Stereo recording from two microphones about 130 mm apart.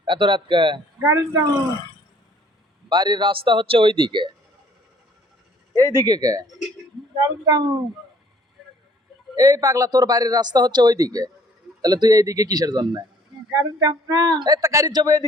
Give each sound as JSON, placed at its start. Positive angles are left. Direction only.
{"t": 0.0, "sound": "speech", "side_deg": -40}
{"t": 0.9, "sound": "speech", "side_deg": -20}
{"t": 2.9, "sound": "speech", "side_deg": -35}
{"t": 5.7, "sound": "speech", "side_deg": -25}
{"t": 9.3, "sound": "speech", "side_deg": -30}